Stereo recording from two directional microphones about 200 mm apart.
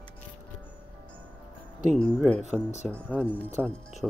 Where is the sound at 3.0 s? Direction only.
10° left (ahead or behind).